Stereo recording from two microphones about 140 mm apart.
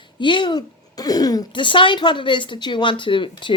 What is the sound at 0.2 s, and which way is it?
Speech, 35° left (ahead or behind).